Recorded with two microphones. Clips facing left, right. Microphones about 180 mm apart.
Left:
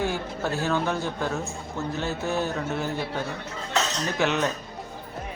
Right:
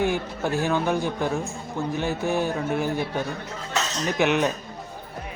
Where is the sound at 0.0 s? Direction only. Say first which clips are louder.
Right 3 dB; 15° right (ahead or behind).